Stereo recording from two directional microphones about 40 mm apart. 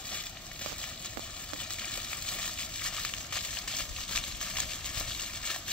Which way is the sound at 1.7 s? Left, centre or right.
Left.